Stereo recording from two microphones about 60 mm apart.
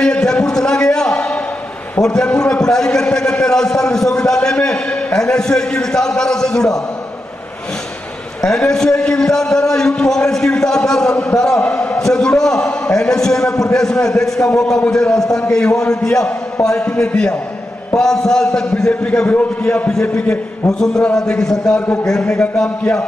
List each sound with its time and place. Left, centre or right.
0.0 s a sound: centre
2.0 s a man's voice: centre
8.5 s a man's voice: centre
11.6 s a man's voice: left
12.0 s a man's voice: centre
20.8 s a man's voice: centre